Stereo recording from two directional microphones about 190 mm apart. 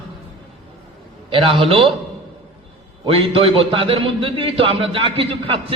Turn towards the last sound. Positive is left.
turn(degrees=-30)  # may be behind; listen again after turning